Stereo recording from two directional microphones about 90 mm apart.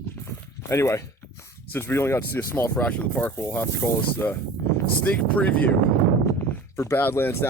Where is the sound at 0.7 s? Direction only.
30° left (ahead or behind).